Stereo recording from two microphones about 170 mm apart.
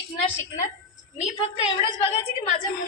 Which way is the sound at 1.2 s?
40° left (ahead or behind).